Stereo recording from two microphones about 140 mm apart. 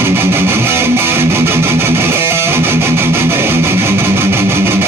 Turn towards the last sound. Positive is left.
turn(degrees=-15)  # may be behind; listen again after turning